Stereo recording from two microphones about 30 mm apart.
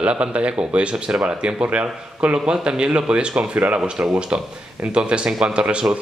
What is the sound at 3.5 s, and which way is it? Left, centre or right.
Speech, right.